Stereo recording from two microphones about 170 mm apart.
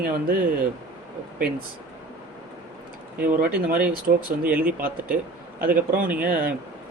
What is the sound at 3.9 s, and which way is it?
Speech, 55° right (ahead or behind).